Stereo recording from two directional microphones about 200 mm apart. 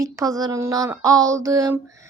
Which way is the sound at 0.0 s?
15° right (ahead or behind).